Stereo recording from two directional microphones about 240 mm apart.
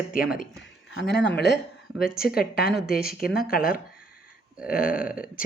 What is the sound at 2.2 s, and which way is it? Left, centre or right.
A woman's voice, left.